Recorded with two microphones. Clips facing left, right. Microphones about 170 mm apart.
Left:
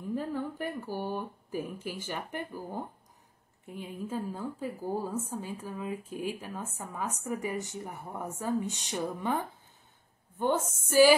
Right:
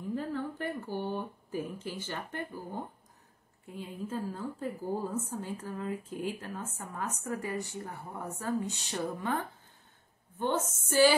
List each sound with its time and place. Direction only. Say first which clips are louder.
0.1 s a woman's voice: left 1 dB; 10° left (ahead or behind)
4.1 s a woman's voice: left 1 dB; 15° left (ahead or behind)